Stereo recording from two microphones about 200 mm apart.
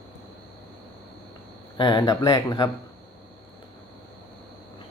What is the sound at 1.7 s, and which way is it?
Speech, 25° left (ahead or behind).